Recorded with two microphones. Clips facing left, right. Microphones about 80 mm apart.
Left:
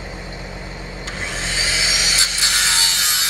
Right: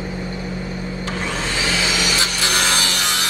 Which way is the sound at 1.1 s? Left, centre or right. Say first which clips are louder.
Right 2 dB; left.